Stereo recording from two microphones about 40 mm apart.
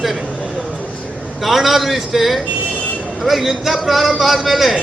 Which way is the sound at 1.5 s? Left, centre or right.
Centre.